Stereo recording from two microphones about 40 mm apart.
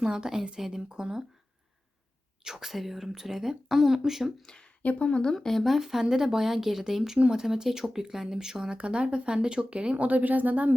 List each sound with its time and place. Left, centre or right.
0.0 s speech: right
2.4 s speech: centre
4.4 s a woman's voice: centre
4.8 s speech: left
5.3 s speech: centre
5.7 s speech: centre
8.7 s speech: right